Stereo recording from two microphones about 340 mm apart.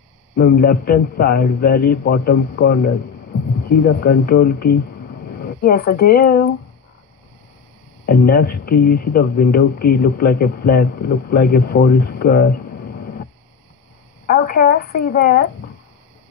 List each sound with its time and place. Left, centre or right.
0.4 s speech: left
8.1 s speech: left
14.2 s a sound: left